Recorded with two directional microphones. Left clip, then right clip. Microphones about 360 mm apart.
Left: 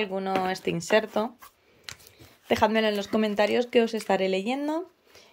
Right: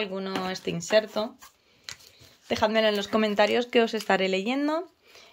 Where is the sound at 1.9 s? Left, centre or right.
Centre.